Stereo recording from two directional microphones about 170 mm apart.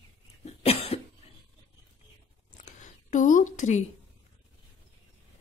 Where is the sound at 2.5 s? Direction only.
45° left (ahead or behind).